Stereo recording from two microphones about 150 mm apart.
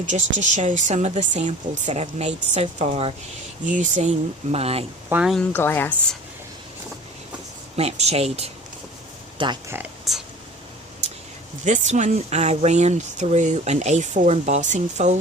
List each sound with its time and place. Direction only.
0.0 s speech: 55° right (ahead or behind)
3.7 s speech: 55° right (ahead or behind)
4.5 s speech: 40° right (ahead or behind)
5.2 s speech: centre (ahead or behind)
5.5 s a woman's voice: 15° left (ahead or behind)
7.8 s speech: 45° right (ahead or behind)
10.1 s a sound: centre (ahead or behind)
11.6 s speech: 55° right (ahead or behind)